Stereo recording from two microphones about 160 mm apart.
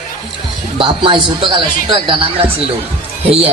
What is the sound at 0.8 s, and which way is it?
A man's voice, 30° right (ahead or behind).